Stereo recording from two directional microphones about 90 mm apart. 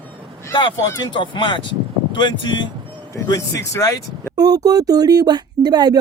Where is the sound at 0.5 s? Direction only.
60° left (ahead or behind).